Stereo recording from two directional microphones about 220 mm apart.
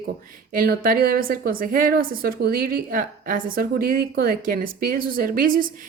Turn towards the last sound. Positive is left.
turn(degrees=-40)  # may be behind; listen again after turning